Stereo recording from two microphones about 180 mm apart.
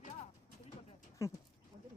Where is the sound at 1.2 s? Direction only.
15° left (ahead or behind).